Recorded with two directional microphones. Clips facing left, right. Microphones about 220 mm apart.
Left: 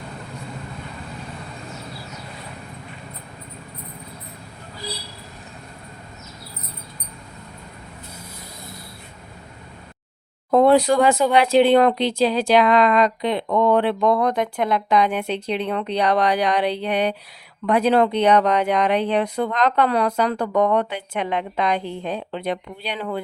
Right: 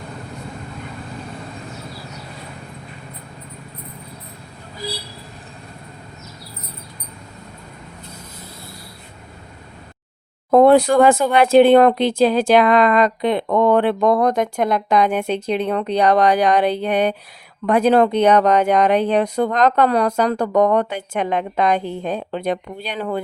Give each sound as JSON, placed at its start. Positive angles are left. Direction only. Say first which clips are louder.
{"t": 10.5, "sound": "speech", "louder": "right 3 dB", "side_deg": -50}